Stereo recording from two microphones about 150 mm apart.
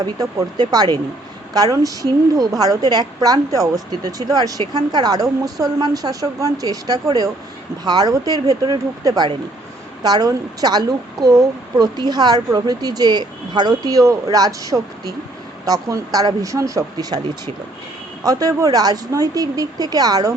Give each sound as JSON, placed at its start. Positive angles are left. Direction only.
{"t": 0.0, "sound": "a woman's voice", "side_deg": -25}